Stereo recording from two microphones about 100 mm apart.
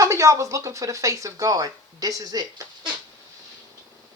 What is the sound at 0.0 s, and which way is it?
Speech, 30° right (ahead or behind).